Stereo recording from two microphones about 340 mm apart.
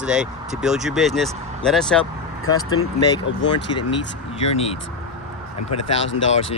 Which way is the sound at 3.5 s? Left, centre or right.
Centre.